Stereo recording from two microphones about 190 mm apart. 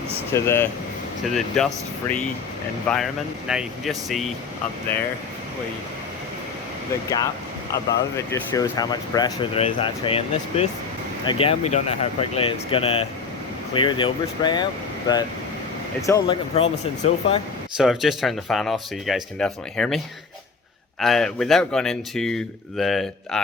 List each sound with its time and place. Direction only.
0.3 s speech: 15° left (ahead or behind)
1.6 s speech: centre (ahead or behind)
2.8 s speech: centre (ahead or behind)
7.7 s speech: 15° left (ahead or behind)
17.7 s speech: centre (ahead or behind)
21.0 s speech: centre (ahead or behind)